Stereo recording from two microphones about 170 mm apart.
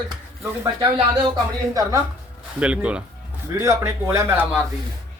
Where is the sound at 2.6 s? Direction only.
5° right (ahead or behind).